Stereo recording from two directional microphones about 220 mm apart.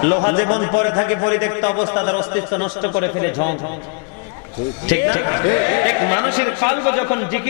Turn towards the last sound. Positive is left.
turn(degrees=15)  # may be behind; listen again after turning